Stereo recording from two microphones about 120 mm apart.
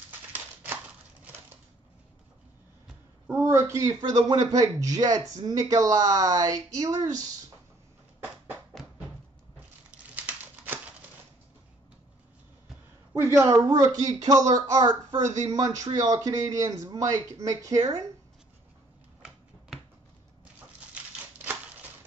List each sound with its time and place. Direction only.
3.3 s speech: 20° right (ahead or behind)
10.1 s a sound: 15° right (ahead or behind)
13.1 s speech: 25° right (ahead or behind)